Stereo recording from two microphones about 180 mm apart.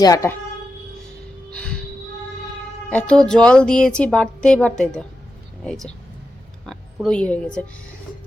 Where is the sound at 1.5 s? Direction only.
5° left (ahead or behind).